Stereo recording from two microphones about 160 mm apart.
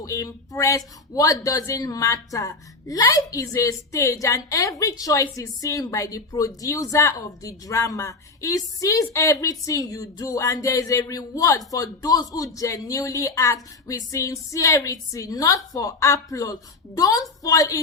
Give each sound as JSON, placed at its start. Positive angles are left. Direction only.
{"t": 0.0, "sound": "speech", "side_deg": 20}